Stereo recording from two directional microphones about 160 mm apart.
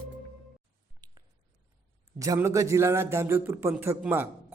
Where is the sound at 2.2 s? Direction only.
20° right (ahead or behind).